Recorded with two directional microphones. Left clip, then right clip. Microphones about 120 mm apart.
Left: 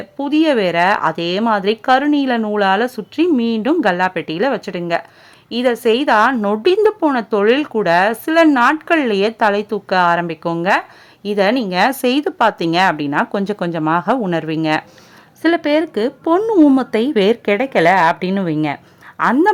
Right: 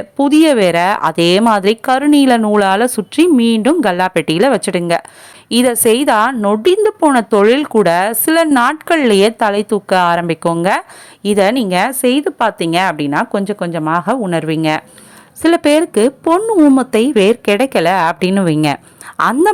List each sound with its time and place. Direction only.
0.2 s speech: 40° right (ahead or behind)
3.9 s a woman's voice: 45° right (ahead or behind)
6.6 s speech: 25° right (ahead or behind)
12.0 s a woman's voice: 15° right (ahead or behind)
13.4 s a woman's voice: 10° right (ahead or behind); by 19.5 s 35° right (ahead or behind)